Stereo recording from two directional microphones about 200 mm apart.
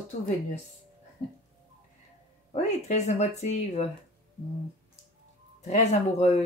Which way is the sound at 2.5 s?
35° left (ahead or behind).